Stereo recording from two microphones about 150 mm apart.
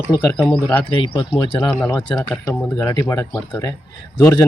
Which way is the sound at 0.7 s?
10° left (ahead or behind).